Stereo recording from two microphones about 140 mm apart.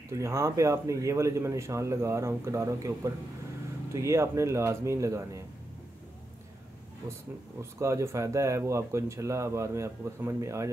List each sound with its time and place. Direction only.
0.1 s a man's voice: 20° right (ahead or behind)
7.8 s a man's voice: 20° right (ahead or behind)